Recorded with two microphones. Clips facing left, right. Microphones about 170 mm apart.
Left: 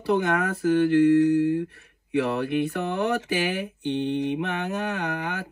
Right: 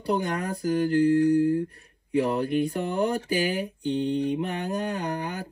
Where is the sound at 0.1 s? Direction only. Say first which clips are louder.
Left 4 dB; 35° right (ahead or behind).